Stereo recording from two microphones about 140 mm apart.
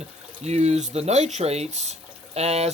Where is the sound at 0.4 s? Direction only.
50° right (ahead or behind).